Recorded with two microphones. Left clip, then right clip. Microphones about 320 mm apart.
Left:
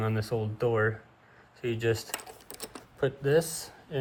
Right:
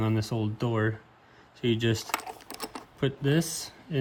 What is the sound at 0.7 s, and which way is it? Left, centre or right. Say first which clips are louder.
Speech: left 2 dB; left.